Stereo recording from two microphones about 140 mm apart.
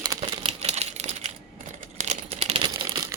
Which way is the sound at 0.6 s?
50° right (ahead or behind).